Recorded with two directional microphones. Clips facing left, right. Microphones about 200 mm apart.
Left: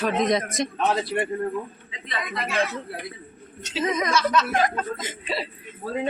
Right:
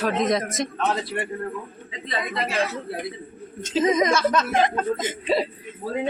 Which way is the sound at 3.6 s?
45° right (ahead or behind).